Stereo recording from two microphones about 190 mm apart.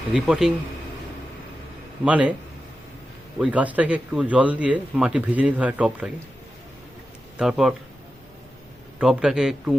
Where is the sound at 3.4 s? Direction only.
5° right (ahead or behind).